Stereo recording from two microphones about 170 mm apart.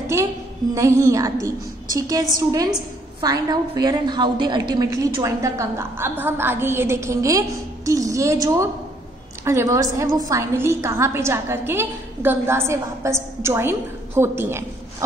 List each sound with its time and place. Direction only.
0.7 s a woman's voice: 20° right (ahead or behind)